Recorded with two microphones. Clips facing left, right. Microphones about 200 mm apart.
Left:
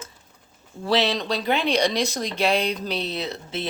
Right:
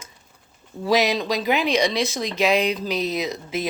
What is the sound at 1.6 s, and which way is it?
Speech, 35° left (ahead or behind).